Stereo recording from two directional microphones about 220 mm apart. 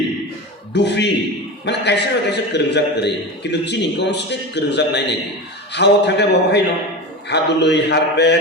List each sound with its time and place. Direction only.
0.7 s a man's voice: 50° left (ahead or behind)